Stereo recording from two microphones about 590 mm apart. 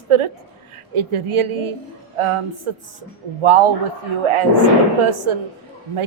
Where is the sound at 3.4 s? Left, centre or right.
Right.